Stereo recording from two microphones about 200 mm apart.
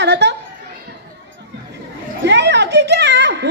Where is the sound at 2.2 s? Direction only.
60° right (ahead or behind).